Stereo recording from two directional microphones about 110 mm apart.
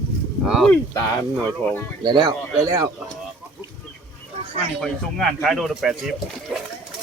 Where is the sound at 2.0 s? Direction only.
40° right (ahead or behind).